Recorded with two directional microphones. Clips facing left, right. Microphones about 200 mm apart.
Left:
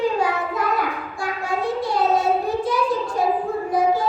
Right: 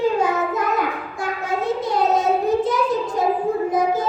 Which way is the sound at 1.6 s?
20° right (ahead or behind).